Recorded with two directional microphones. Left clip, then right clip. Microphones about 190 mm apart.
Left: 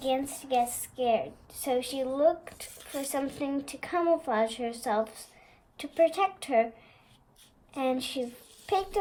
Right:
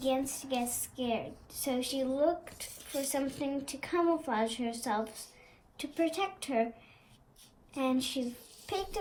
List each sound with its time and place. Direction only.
0.0 s a woman's voice: 55° left (ahead or behind)
7.7 s a woman's voice: 55° left (ahead or behind)